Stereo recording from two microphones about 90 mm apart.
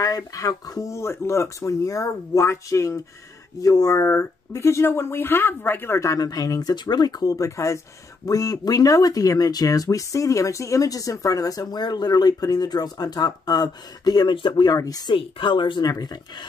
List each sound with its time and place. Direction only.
0.0 s speech: 45° left (ahead or behind)
14.3 s speech: 60° left (ahead or behind)
15.0 s speech: 65° left (ahead or behind)
15.9 s speech: 50° left (ahead or behind)